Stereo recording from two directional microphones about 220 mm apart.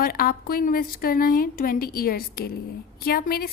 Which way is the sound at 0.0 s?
40° left (ahead or behind).